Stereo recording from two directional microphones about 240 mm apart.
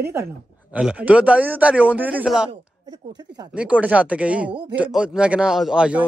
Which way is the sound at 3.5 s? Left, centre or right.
Centre.